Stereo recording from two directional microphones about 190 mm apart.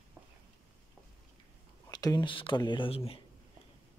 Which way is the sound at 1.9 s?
20° left (ahead or behind).